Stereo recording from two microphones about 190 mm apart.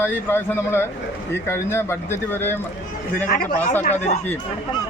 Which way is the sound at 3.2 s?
45° left (ahead or behind).